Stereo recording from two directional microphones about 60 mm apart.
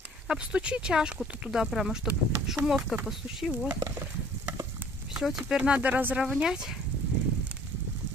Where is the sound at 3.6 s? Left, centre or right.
Right.